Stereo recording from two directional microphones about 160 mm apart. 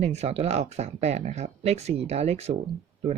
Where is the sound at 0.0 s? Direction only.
40° right (ahead or behind).